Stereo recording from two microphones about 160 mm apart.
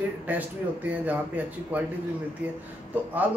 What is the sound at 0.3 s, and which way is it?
Speech, 10° right (ahead or behind).